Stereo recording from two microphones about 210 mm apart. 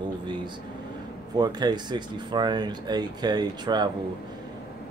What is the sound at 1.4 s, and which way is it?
Speech, 20° right (ahead or behind).